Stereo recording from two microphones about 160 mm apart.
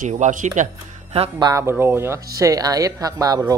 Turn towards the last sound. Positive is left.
turn(degrees=-25)  # may be behind; listen again after turning